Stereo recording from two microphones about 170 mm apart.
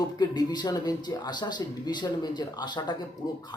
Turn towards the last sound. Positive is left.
turn(degrees=25)  # may be behind; listen again after turning